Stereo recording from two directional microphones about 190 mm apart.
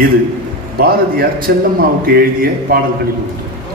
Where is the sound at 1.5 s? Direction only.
55° right (ahead or behind).